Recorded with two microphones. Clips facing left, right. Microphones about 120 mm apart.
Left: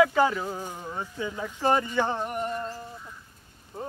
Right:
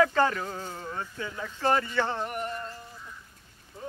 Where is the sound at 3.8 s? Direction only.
55° left (ahead or behind).